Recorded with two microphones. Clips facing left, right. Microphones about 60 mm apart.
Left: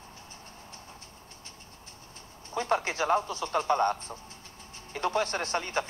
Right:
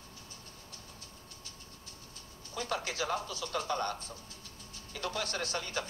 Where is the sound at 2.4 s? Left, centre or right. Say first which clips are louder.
Left 8 dB; left.